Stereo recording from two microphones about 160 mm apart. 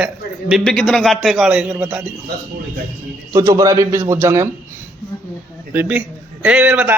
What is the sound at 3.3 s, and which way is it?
A man's voice, 20° right (ahead or behind).